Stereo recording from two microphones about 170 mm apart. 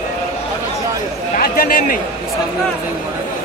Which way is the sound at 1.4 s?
55° left (ahead or behind).